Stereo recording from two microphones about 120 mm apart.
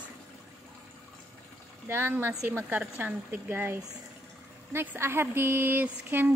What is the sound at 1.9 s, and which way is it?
Speech, 20° right (ahead or behind).